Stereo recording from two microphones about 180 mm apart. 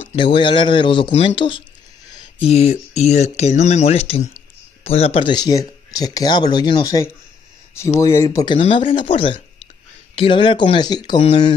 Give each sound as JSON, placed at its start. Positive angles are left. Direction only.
{"t": 0.1, "sound": "speech", "side_deg": 30}
{"t": 8.5, "sound": "speech", "side_deg": 30}